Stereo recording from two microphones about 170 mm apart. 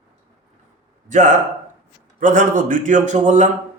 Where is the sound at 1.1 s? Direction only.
45° right (ahead or behind).